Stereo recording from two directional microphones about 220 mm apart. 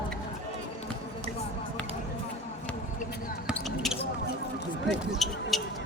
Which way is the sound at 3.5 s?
Centre (ahead or behind).